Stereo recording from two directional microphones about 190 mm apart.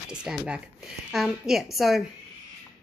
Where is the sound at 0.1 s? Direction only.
5° right (ahead or behind).